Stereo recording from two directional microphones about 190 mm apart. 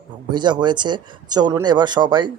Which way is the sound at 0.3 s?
25° right (ahead or behind).